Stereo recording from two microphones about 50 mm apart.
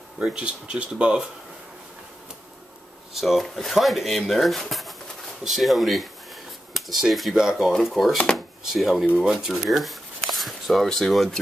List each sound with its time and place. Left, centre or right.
0.2 s speech: right
3.2 s speech: centre